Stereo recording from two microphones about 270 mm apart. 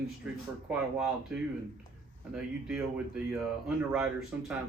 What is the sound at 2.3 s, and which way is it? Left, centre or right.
Speech, centre.